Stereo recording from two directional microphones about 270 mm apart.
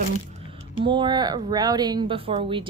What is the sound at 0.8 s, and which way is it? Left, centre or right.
Speech, centre.